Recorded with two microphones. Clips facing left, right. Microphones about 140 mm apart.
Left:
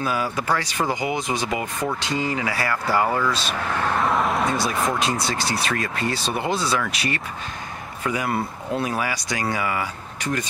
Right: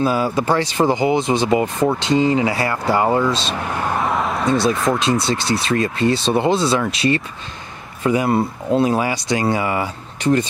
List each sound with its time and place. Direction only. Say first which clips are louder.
0.0 s speech: right 7 dB; 30° right (ahead or behind)
4.0 s a sound: right 1 dB; centre (ahead or behind)
4.5 s speech: right 6 dB; 25° right (ahead or behind)